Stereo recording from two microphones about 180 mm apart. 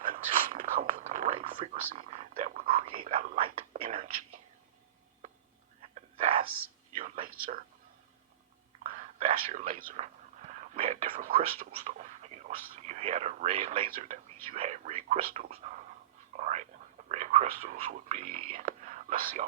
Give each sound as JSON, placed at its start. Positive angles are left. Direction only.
{"t": 0.1, "sound": "whispering", "side_deg": -50}
{"t": 1.4, "sound": "whispering", "side_deg": -35}
{"t": 3.2, "sound": "speech", "side_deg": -45}
{"t": 5.8, "sound": "whispering", "side_deg": -35}
{"t": 7.0, "sound": "a sound", "side_deg": -50}
{"t": 8.8, "sound": "whispering", "side_deg": -35}
{"t": 10.5, "sound": "speech", "side_deg": -35}
{"t": 13.9, "sound": "speech", "side_deg": -40}
{"t": 16.4, "sound": "whispering", "side_deg": -40}
{"t": 17.1, "sound": "speech", "side_deg": -40}